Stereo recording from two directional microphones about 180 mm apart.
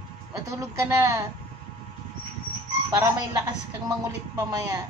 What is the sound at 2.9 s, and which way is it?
Speech, 15° right (ahead or behind).